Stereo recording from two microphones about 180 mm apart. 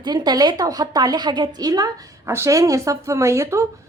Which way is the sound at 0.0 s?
25° right (ahead or behind).